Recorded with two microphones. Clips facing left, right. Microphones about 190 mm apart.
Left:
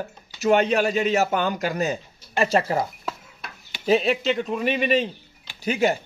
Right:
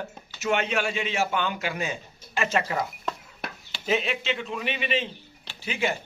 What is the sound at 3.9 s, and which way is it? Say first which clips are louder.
Speech: left 7 dB; 35° left (ahead or behind).